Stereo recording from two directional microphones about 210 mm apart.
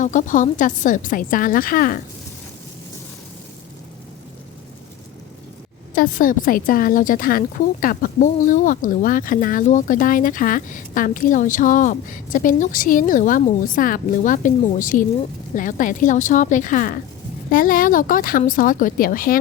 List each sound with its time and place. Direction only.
0.0 s a woman's voice: 35° left (ahead or behind)
5.9 s a woman's voice: 40° left (ahead or behind)